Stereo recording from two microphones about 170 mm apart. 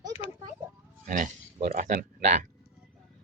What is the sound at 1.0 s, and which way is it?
Speech, 50° right (ahead or behind).